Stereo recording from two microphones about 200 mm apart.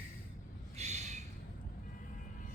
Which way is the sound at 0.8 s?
35° right (ahead or behind).